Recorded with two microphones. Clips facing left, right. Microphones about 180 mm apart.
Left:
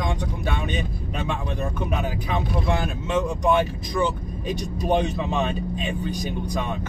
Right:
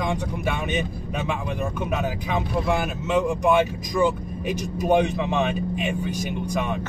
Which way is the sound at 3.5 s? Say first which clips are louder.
Left 1 dB; 10° right (ahead or behind).